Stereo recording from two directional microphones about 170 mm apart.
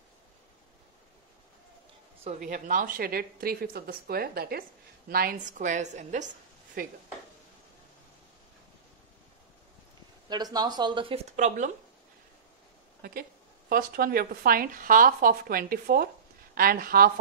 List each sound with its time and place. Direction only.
2.3 s a woman's voice: 50° right (ahead or behind)
10.3 s speech: 25° right (ahead or behind)
11.3 s a woman's voice: 45° right (ahead or behind)
13.7 s speech: 60° right (ahead or behind)